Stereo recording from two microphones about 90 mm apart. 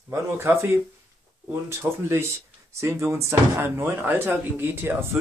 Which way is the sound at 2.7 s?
30° right (ahead or behind).